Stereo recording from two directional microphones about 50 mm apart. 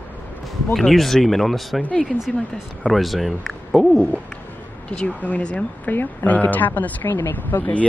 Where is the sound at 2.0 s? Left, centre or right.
Centre.